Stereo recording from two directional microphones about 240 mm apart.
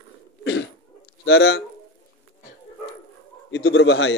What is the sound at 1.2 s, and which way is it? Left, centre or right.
Speech, left.